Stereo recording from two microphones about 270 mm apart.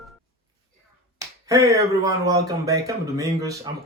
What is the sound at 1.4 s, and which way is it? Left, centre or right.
A man's voice, centre.